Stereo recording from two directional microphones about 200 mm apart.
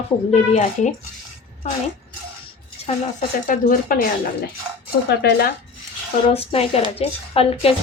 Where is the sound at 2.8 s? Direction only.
40° left (ahead or behind).